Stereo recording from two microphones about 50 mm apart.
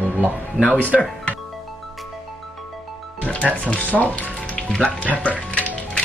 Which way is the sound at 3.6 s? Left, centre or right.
Left.